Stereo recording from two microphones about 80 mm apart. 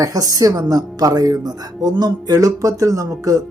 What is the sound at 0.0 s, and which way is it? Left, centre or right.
Speech, right.